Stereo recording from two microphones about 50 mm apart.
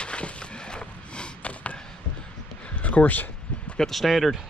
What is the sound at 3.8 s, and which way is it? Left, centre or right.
Speech, centre.